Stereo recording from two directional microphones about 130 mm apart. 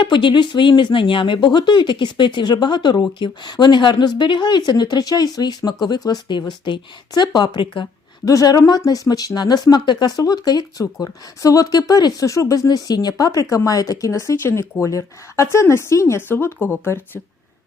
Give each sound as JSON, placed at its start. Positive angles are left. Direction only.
{"t": 0.0, "sound": "speech", "side_deg": 40}
{"t": 8.2, "sound": "speech", "side_deg": 25}